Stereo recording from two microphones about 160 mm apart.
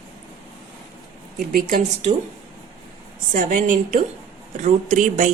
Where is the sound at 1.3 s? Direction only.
60° right (ahead or behind).